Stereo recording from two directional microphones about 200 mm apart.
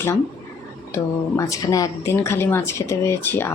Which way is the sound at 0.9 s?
15° left (ahead or behind).